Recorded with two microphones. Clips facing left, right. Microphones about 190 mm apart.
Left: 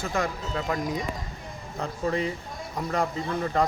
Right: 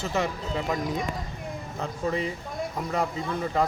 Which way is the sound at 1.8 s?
Centre (ahead or behind).